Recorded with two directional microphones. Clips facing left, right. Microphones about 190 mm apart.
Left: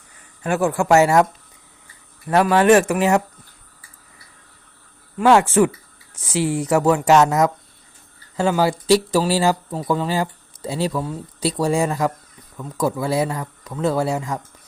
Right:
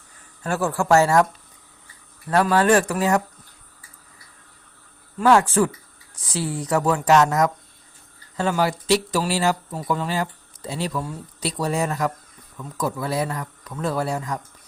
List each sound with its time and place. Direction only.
0.4 s speech: 15° left (ahead or behind)
5.2 s speech: 25° left (ahead or behind)